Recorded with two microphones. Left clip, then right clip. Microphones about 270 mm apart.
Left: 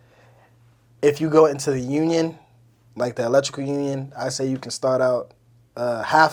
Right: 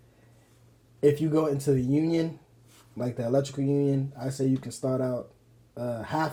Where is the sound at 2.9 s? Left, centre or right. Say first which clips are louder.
Left 8 dB; centre.